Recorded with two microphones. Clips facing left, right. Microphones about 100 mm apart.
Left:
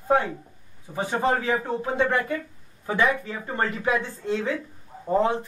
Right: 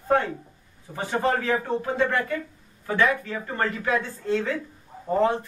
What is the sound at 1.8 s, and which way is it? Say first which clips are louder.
Speech: left 3 dB; 20° left (ahead or behind).